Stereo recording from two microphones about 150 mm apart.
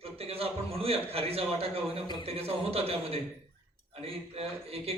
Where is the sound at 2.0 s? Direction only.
30° left (ahead or behind).